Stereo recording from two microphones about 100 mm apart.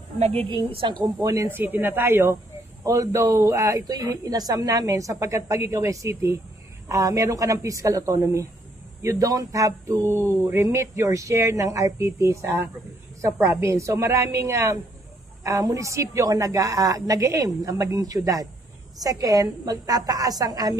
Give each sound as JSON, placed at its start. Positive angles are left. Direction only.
{"t": 0.2, "sound": "a woman's voice", "side_deg": -75}
{"t": 1.2, "sound": "speech", "side_deg": -30}
{"t": 1.6, "sound": "a woman's voice", "side_deg": -20}
{"t": 2.8, "sound": "a woman's voice", "side_deg": -35}